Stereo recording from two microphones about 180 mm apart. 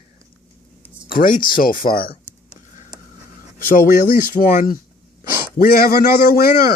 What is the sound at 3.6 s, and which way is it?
Speech, 50° left (ahead or behind).